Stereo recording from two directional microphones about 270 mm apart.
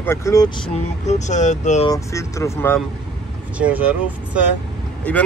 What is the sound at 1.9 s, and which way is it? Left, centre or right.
Speech, centre.